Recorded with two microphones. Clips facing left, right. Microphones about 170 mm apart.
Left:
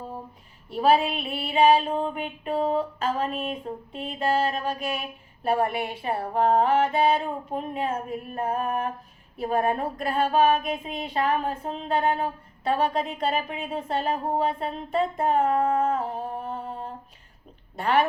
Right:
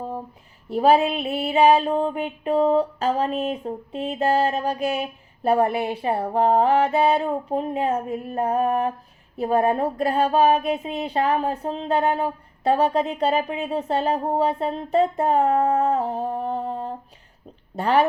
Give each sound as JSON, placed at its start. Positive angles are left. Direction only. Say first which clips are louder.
{"t": 0.7, "sound": "female singing", "louder": "right 4 dB", "side_deg": -40}